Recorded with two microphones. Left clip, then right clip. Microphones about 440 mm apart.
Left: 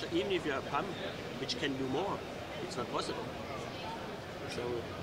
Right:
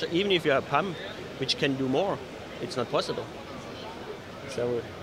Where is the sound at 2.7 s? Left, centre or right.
Right.